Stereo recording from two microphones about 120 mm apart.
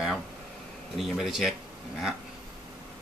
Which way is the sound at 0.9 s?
Centre (ahead or behind).